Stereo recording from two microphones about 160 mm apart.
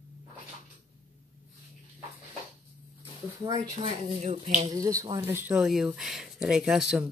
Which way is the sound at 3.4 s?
25° right (ahead or behind).